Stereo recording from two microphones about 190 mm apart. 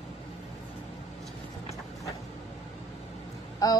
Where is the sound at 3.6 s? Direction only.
20° left (ahead or behind).